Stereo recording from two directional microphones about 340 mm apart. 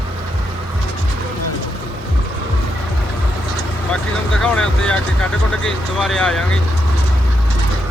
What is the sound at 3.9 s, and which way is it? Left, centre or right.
Vehicle, centre.